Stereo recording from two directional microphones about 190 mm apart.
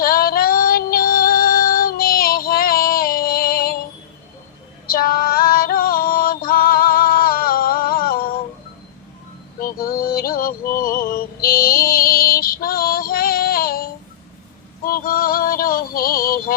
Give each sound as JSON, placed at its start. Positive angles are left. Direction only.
{"t": 0.0, "sound": "female singing", "side_deg": 50}
{"t": 4.9, "sound": "music", "side_deg": 50}
{"t": 9.6, "sound": "music", "side_deg": 50}
{"t": 14.8, "sound": "synthetic singing", "side_deg": 50}